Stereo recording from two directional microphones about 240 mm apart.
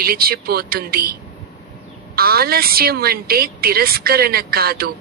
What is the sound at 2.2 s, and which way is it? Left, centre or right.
A woman's voice, right.